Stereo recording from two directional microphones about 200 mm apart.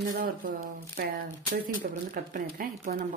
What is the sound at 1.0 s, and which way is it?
Speech, 45° right (ahead or behind).